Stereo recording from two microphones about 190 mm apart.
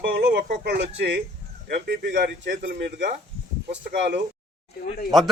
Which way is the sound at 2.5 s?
55° right (ahead or behind).